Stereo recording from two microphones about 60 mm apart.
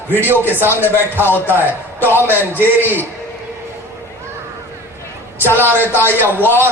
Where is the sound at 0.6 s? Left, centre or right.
Right.